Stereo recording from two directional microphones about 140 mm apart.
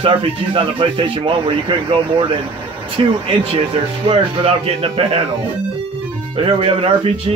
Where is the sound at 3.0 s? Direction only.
40° right (ahead or behind).